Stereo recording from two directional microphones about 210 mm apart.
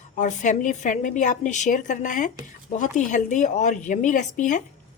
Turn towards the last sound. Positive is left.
turn(degrees=35)  # may be behind; listen again after turning